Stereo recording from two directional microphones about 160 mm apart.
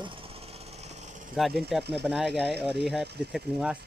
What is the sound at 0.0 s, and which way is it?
Jackhammer, 35° right (ahead or behind).